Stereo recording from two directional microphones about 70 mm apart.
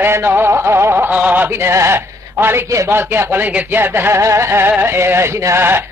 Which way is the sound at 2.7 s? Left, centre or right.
Right.